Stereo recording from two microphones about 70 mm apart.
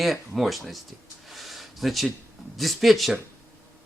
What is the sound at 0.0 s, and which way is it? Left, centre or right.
Speech, centre.